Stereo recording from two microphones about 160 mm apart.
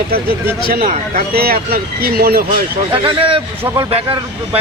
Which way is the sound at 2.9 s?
30° right (ahead or behind).